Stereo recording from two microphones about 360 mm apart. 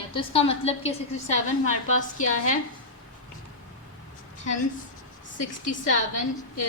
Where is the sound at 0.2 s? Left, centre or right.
Centre.